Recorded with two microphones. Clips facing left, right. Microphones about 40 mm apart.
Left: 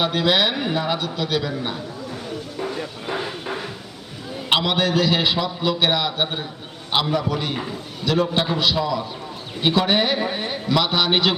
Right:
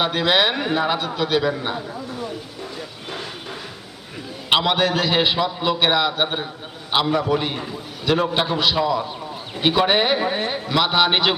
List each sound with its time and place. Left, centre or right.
0.0 s a man's voice: centre
3.1 s a sound: left
4.5 s a man's voice: centre